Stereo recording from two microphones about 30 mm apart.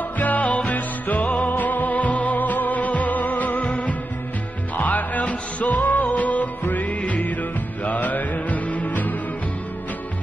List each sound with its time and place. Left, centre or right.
0.2 s music: left
1.5 s music: left
3.6 s music: left
4.7 s music: left